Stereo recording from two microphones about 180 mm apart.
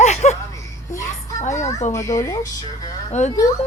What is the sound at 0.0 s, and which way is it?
Music, 40° left (ahead or behind).